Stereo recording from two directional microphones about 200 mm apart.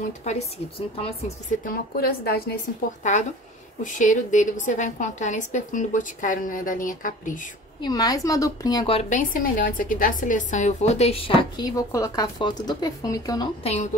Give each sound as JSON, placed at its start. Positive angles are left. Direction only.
{"t": 0.2, "sound": "a woman's voice", "side_deg": 35}
{"t": 1.7, "sound": "a woman's voice", "side_deg": 50}
{"t": 3.0, "sound": "a woman's voice", "side_deg": 40}
{"t": 7.8, "sound": "a woman's voice", "side_deg": 20}
{"t": 9.3, "sound": "a woman's voice", "side_deg": 45}